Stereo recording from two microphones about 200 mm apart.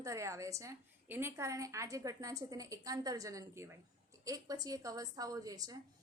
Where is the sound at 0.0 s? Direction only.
15° right (ahead or behind).